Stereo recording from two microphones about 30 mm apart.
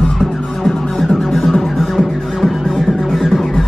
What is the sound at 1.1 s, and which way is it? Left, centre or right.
Music, centre.